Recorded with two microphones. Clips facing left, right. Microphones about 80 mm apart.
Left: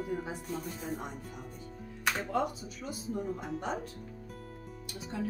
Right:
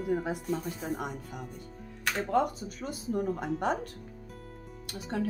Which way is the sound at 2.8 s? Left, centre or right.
Right.